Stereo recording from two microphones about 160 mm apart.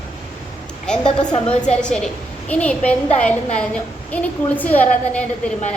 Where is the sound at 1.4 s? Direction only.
5° left (ahead or behind).